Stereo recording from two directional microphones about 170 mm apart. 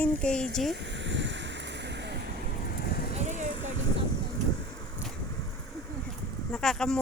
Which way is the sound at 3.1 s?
45° right (ahead or behind).